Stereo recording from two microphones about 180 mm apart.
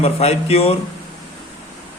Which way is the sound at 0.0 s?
35° left (ahead or behind).